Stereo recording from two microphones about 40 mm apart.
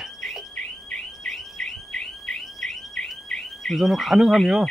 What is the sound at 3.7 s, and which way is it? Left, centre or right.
Speech, centre.